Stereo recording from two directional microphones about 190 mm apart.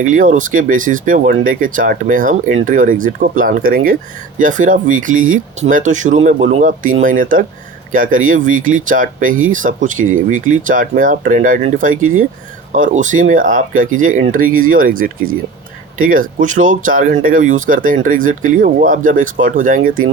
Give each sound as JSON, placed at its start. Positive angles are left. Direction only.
{"t": 0.0, "sound": "speech", "side_deg": -45}